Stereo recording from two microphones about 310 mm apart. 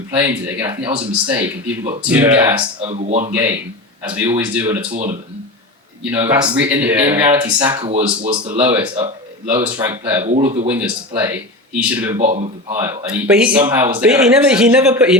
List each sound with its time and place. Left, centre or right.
0.1 s speech: centre
1.4 s speech: right
2.0 s speech: centre; by 3.3 s right
4.1 s speech: centre
6.1 s speech: centre
7.8 s speech: centre
8.5 s speech: centre
10.2 s speech: centre
10.7 s speech: centre
12.2 s speech: right
12.7 s speech: centre